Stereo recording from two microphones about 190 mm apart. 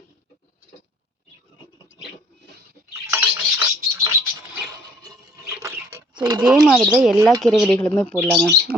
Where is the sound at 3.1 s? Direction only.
10° right (ahead or behind).